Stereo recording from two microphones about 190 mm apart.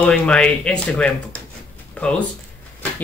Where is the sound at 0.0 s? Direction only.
5° left (ahead or behind).